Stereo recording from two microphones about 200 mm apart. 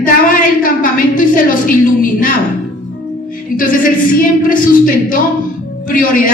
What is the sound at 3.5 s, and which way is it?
Speech, 45° left (ahead or behind).